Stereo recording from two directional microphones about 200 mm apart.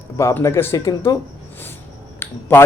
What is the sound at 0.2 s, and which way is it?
A man's voice, 15° left (ahead or behind).